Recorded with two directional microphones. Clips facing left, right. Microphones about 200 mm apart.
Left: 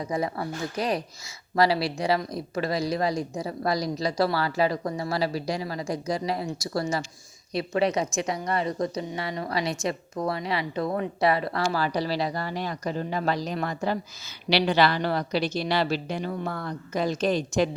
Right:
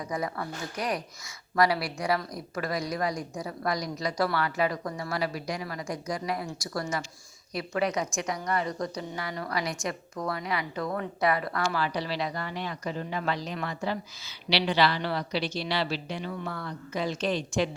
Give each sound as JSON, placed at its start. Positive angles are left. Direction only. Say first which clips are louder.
{"t": 0.0, "sound": "a woman's voice", "louder": "left 4 dB", "side_deg": 25}